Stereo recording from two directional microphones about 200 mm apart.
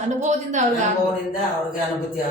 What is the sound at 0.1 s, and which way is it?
Speech, 35° right (ahead or behind).